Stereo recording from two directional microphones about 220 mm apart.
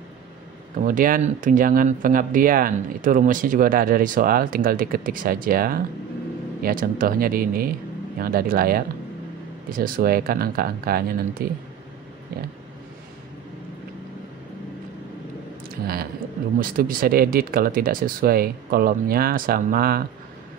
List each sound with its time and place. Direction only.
0.8 s speech: 40° right (ahead or behind)
16.5 s speech: 40° right (ahead or behind)